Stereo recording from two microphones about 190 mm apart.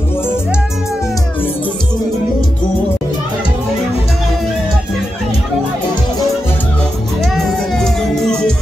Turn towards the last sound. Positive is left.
turn(degrees=0)  # may be behind; listen again after turning